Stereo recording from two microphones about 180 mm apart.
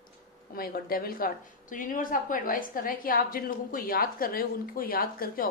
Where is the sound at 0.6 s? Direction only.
55° left (ahead or behind).